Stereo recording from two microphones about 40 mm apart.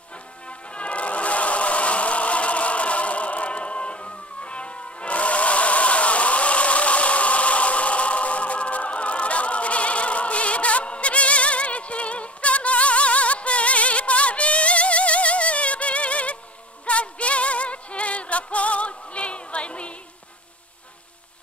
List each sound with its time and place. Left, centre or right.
0.5 s music: left